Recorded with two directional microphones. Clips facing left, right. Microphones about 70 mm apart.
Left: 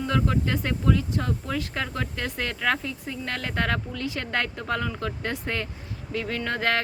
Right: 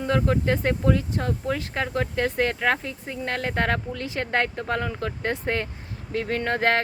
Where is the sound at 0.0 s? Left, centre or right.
Right.